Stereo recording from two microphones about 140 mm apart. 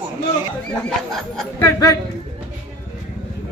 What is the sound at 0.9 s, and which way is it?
Speech, 5° left (ahead or behind).